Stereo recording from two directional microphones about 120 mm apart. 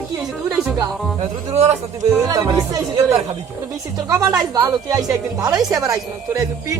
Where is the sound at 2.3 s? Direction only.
30° right (ahead or behind).